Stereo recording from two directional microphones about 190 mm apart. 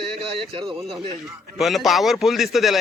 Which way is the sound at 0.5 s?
30° right (ahead or behind).